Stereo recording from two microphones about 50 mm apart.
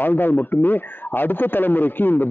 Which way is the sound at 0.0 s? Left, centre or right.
Left.